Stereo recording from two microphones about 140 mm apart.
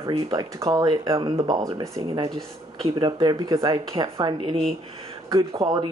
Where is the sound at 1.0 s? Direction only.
40° right (ahead or behind).